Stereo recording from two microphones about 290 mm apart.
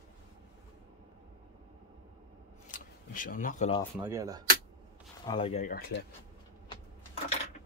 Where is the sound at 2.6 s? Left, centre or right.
Left.